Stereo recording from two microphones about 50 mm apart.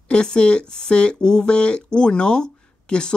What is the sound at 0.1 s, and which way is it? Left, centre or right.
Speech, centre.